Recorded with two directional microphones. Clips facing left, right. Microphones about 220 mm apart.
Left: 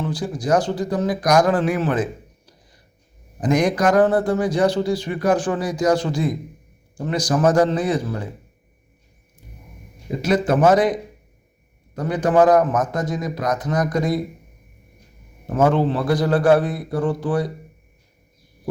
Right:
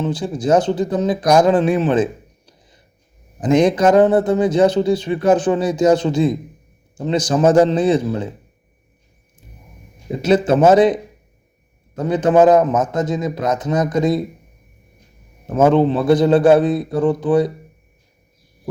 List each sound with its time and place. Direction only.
0.0 s speech: 25° right (ahead or behind)
3.5 s speech: 25° right (ahead or behind)
10.2 s speech: 25° right (ahead or behind)
12.0 s speech: 25° right (ahead or behind)
15.5 s speech: 20° right (ahead or behind)